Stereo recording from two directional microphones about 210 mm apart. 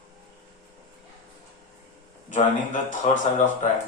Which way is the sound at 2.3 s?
35° left (ahead or behind).